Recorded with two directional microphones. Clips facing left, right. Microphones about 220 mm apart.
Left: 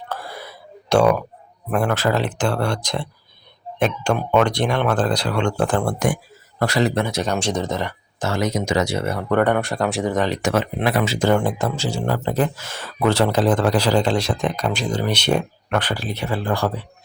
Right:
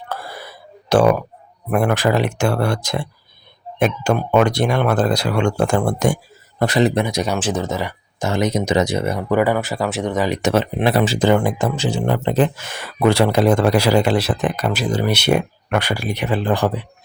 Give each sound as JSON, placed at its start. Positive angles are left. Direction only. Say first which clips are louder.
{"t": 0.1, "sound": "a sound", "louder": "right 2 dB", "side_deg": -5}
{"t": 1.7, "sound": "speech", "louder": "right 3 dB", "side_deg": -10}
{"t": 9.3, "sound": "speech", "louder": "even", "side_deg": -5}
{"t": 10.2, "sound": "speech", "louder": "right 3 dB", "side_deg": -15}
{"t": 10.8, "sound": "speech", "louder": "right 3 dB", "side_deg": -30}
{"t": 11.4, "sound": "speech", "louder": "right 3 dB", "side_deg": -15}